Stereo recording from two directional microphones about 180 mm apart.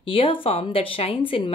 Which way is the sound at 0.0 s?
30° left (ahead or behind).